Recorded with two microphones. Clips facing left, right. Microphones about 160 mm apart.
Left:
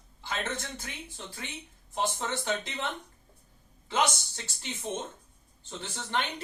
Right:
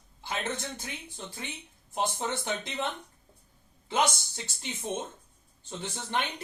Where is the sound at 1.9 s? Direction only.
15° right (ahead or behind).